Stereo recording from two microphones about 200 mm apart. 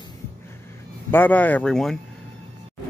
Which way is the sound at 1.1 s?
10° left (ahead or behind).